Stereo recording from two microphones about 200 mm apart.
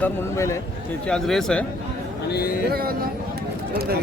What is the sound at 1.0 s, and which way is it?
Speech, 5° left (ahead or behind).